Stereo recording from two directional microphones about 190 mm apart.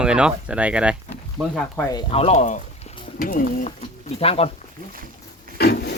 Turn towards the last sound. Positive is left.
turn(degrees=55)  # may be behind; listen again after turning